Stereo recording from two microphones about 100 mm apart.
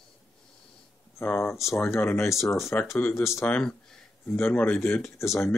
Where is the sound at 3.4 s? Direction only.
10° left (ahead or behind).